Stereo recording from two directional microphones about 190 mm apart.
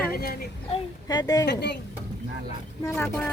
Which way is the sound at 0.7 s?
20° left (ahead or behind).